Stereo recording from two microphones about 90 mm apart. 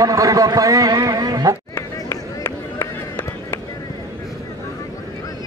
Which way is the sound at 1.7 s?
30° left (ahead or behind).